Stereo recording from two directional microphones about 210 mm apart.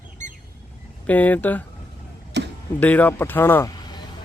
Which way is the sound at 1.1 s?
10° left (ahead or behind).